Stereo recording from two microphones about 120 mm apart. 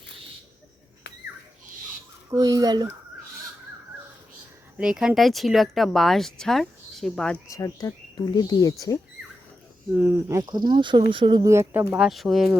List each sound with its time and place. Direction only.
2.3 s speech: 30° right (ahead or behind)
4.8 s speech: 5° right (ahead or behind)
7.5 s speech: 25° left (ahead or behind)
9.9 s speech: 15° right (ahead or behind)
10.5 s speech: 35° right (ahead or behind)
11.4 s speech: 25° right (ahead or behind)
11.9 s speech: centre (ahead or behind)